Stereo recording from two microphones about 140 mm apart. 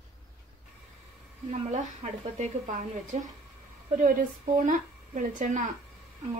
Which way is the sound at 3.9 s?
75° right (ahead or behind).